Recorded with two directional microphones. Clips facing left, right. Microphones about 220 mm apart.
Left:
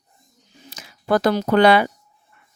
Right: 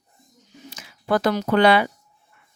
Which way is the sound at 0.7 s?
40° left (ahead or behind).